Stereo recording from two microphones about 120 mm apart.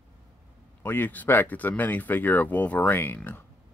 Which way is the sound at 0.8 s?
15° left (ahead or behind).